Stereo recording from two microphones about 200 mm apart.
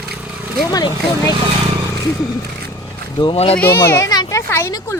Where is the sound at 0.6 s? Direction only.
20° left (ahead or behind).